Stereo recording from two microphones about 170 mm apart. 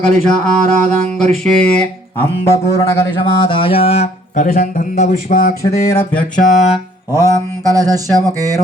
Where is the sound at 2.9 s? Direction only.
25° left (ahead or behind); by 5.6 s 55° left (ahead or behind).